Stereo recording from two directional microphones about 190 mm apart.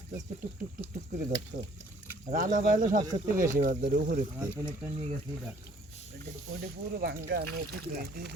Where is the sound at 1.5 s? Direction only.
45° right (ahead or behind).